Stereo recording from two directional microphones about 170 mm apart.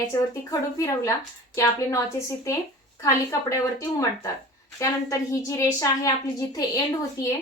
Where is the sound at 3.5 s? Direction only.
20° left (ahead or behind).